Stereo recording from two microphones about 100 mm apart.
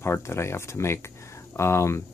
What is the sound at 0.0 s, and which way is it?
Speech, 25° left (ahead or behind).